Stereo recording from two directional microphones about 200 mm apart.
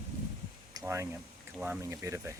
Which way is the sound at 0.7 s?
15° right (ahead or behind).